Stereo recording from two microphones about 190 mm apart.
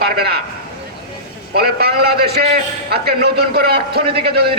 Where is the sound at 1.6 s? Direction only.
55° right (ahead or behind).